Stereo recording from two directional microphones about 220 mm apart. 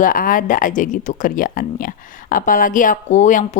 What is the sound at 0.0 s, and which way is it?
Speech, 40° left (ahead or behind).